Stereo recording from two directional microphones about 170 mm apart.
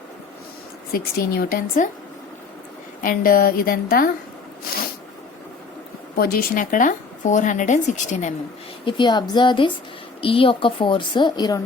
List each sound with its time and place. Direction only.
0.9 s a woman's voice: 60° left (ahead or behind)
3.0 s a woman's voice: 55° left (ahead or behind)
6.1 s speech: 60° left (ahead or behind)
8.8 s a woman's voice: 30° left (ahead or behind)